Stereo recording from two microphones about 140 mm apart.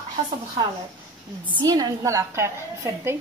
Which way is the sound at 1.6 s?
25° right (ahead or behind).